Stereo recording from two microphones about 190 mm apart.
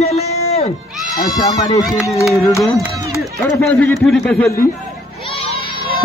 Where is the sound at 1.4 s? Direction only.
20° left (ahead or behind).